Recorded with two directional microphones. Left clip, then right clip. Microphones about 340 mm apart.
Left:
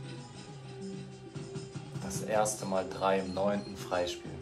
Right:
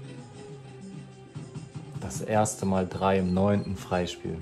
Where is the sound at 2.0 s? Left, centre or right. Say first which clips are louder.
Right 4 dB; right.